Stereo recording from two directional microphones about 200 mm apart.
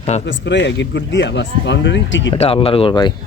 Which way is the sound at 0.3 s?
65° left (ahead or behind).